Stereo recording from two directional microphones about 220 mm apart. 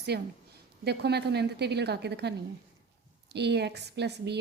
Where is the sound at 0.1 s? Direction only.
45° right (ahead or behind).